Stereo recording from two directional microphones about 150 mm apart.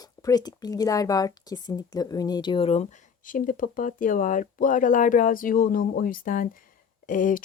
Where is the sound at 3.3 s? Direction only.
65° left (ahead or behind).